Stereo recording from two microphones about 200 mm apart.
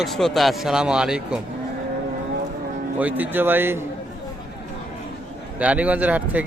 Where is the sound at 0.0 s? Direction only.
Centre (ahead or behind).